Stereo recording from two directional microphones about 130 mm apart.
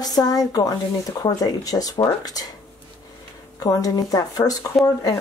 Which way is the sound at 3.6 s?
30° left (ahead or behind).